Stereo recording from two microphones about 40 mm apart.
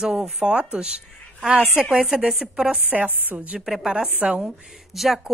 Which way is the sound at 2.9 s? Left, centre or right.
Right.